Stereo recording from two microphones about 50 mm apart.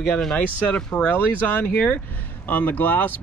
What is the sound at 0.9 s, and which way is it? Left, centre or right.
Speech, left.